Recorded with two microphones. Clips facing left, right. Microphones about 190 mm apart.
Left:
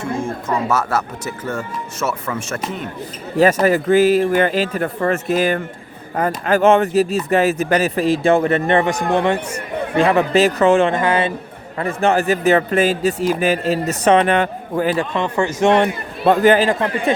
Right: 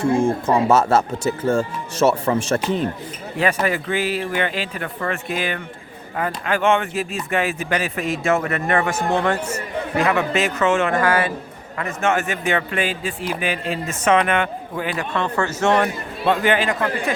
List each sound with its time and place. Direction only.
0.0 s speech: 30° right (ahead or behind)
3.3 s a man's voice: 40° left (ahead or behind)
8.9 s speech: 15° left (ahead or behind)
10.0 s a man's voice: 35° left (ahead or behind)
15.1 s speech: 15° left (ahead or behind)
16.2 s a man's voice: 40° left (ahead or behind)